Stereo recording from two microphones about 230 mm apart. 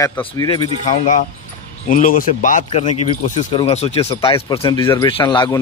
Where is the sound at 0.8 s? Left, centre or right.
Left.